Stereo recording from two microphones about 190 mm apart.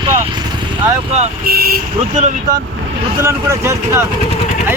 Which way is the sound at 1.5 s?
55° right (ahead or behind).